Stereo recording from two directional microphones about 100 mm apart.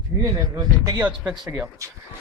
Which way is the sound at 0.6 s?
40° right (ahead or behind).